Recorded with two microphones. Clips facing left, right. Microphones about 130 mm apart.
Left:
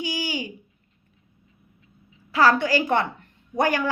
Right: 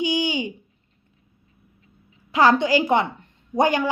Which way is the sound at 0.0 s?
20° right (ahead or behind).